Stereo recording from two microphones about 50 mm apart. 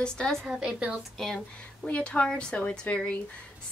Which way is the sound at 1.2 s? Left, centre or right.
Centre.